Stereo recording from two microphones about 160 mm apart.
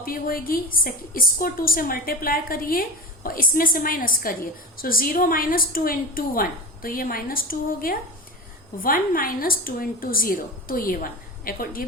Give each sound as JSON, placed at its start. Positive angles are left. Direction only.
{"t": 0.0, "sound": "a woman's voice", "side_deg": 65}